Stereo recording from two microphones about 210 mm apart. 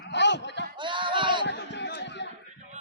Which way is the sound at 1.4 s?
55° left (ahead or behind).